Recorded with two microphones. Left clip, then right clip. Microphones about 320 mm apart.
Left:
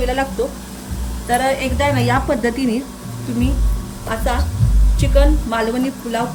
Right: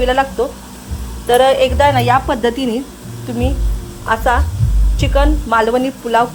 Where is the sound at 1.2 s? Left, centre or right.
Centre.